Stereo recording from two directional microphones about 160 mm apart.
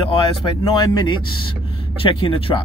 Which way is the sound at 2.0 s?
35° left (ahead or behind).